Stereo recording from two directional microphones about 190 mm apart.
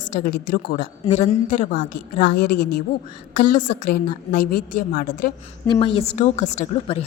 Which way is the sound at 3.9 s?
50° left (ahead or behind).